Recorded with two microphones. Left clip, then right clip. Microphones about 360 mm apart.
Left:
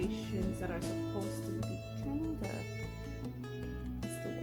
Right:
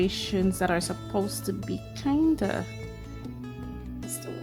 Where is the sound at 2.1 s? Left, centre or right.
Right.